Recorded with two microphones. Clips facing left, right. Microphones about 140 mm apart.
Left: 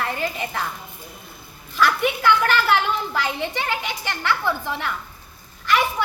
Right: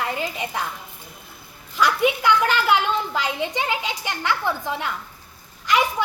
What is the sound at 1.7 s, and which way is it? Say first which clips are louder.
A child's voice: right 1 dB; 15° right (ahead or behind).